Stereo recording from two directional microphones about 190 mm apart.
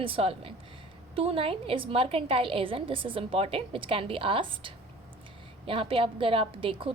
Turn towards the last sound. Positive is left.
turn(degrees=-30)  # may be behind; listen again after turning